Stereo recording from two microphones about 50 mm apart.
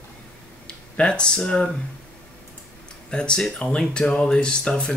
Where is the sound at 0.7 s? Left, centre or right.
Centre.